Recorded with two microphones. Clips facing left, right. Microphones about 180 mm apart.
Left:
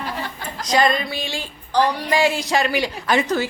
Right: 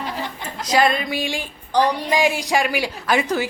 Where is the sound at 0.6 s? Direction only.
5° right (ahead or behind).